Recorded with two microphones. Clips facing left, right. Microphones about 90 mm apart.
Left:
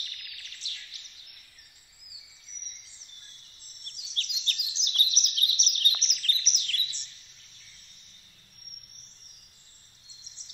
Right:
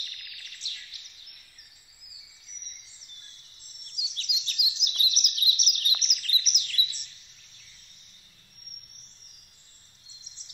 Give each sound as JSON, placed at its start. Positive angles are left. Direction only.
{"t": 0.7, "sound": "bird vocalization", "side_deg": -15}
{"t": 3.8, "sound": "a sound", "side_deg": -5}
{"t": 4.5, "sound": "chirp", "side_deg": -5}
{"t": 5.8, "sound": "bird", "side_deg": -5}